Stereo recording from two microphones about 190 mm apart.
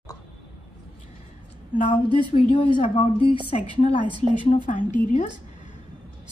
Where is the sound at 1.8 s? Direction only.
25° left (ahead or behind).